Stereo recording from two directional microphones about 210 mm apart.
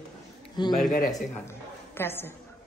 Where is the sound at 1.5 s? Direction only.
10° left (ahead or behind).